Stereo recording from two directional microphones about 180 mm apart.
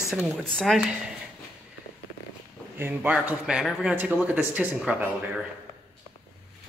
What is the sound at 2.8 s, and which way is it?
Speech, 10° right (ahead or behind).